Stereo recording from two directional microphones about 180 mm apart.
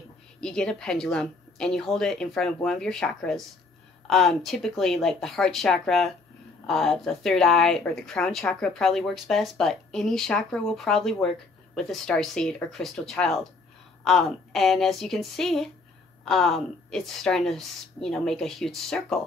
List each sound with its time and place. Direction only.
0.4 s speech: 5° left (ahead or behind)